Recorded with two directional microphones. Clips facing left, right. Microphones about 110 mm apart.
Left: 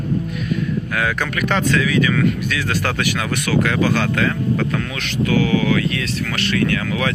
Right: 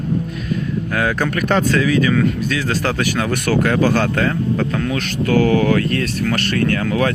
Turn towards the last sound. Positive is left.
turn(degrees=-40)  # may be behind; listen again after turning